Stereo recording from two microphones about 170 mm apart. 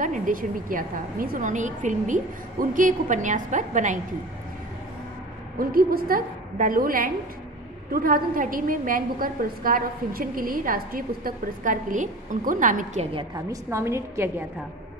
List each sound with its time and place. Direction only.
0.0 s a woman's voice: 55° right (ahead or behind)
5.6 s a woman's voice: 60° right (ahead or behind); by 13.2 s 40° right (ahead or behind)
13.2 s a woman's voice: 20° right (ahead or behind)